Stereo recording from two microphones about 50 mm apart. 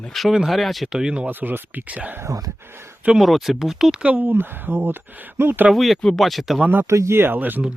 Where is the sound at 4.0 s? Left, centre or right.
Right.